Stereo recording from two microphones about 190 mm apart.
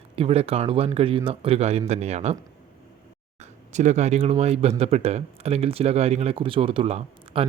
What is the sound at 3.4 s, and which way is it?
Speech, 40° right (ahead or behind).